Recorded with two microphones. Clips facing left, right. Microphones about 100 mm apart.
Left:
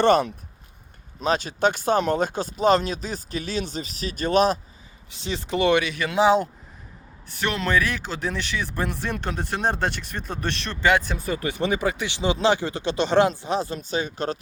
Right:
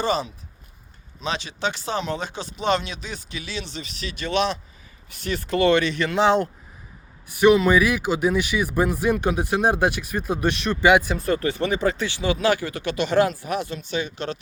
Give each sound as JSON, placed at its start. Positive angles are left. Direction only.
{"t": 0.0, "sound": "speech", "side_deg": 60}
{"t": 1.2, "sound": "speech", "side_deg": 45}
{"t": 5.0, "sound": "speech", "side_deg": 20}
{"t": 7.3, "sound": "speech", "side_deg": -10}
{"t": 11.1, "sound": "speech", "side_deg": 0}
{"t": 11.3, "sound": "speech", "side_deg": 15}